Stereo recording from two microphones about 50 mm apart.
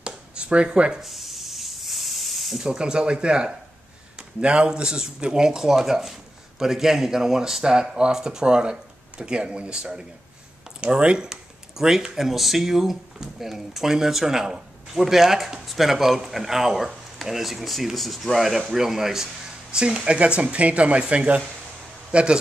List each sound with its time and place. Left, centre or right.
0.0 s a sound: right
1.0 s spray: centre
2.6 s speech: centre
11.2 s speech: centre